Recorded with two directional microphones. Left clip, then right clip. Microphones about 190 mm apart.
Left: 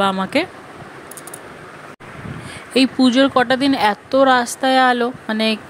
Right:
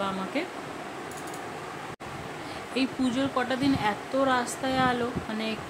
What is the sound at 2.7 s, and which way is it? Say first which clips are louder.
Speech: left 14 dB; 45° left (ahead or behind).